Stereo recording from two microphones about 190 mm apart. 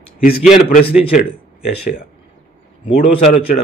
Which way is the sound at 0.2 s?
45° left (ahead or behind).